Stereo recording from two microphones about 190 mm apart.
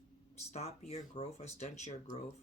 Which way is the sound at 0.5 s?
35° left (ahead or behind).